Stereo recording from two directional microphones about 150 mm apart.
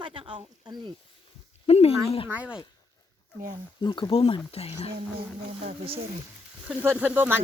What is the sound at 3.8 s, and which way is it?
Speech, 30° left (ahead or behind).